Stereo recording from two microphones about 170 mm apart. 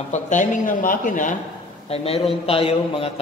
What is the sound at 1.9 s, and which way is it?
A man's voice, 35° left (ahead or behind).